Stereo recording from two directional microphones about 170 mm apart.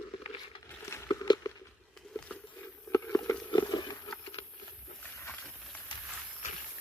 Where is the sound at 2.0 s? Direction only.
5° left (ahead or behind); by 4.4 s 30° left (ahead or behind).